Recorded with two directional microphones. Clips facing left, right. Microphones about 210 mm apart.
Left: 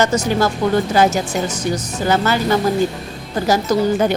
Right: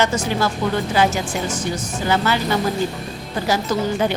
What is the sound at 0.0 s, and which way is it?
A woman's voice, 40° left (ahead or behind).